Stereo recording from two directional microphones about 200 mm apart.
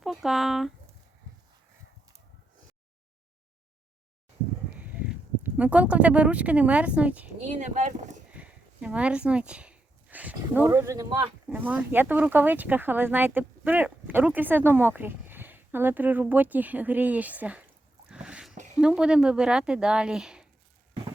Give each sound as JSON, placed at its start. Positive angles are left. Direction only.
{"t": 0.0, "sound": "speech", "side_deg": 0}
{"t": 4.8, "sound": "speech", "side_deg": -5}
{"t": 7.4, "sound": "speech", "side_deg": -35}
{"t": 8.3, "sound": "speech", "side_deg": -5}
{"t": 18.1, "sound": "a sound", "side_deg": -5}
{"t": 18.5, "sound": "a sound", "side_deg": -35}
{"t": 18.8, "sound": "speech", "side_deg": -5}